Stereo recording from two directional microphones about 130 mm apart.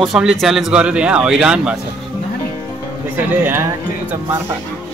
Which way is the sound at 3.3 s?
15° right (ahead or behind).